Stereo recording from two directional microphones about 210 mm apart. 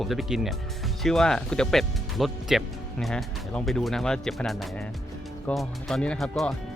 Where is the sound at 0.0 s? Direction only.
Centre (ahead or behind).